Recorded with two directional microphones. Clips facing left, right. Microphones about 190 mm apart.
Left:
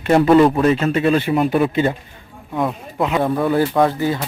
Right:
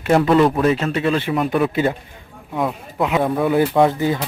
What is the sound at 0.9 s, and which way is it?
Speech, 45° left (ahead or behind).